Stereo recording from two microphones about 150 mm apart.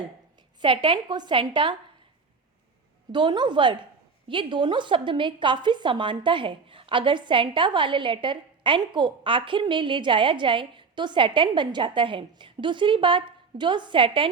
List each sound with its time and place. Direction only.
0.6 s a woman's voice: 35° right (ahead or behind)
3.1 s a woman's voice: 30° right (ahead or behind)